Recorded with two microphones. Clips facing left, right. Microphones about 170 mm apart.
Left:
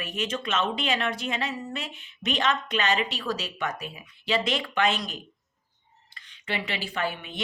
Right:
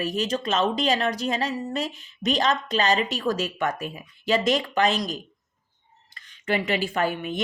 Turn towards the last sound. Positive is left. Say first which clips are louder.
# right 5 dB
turn(degrees=-45)  # may be behind; listen again after turning